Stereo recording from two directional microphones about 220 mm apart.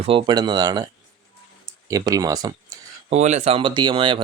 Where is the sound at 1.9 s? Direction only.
15° right (ahead or behind).